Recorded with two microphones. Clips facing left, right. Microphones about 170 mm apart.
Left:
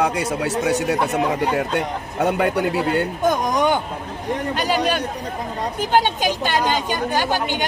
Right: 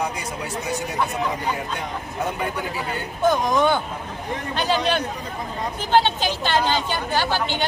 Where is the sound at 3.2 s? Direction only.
15° left (ahead or behind).